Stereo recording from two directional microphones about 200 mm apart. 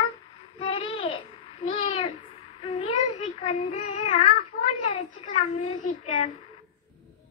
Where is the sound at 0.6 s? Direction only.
25° left (ahead or behind).